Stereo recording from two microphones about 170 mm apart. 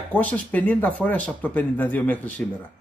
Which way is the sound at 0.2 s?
10° left (ahead or behind).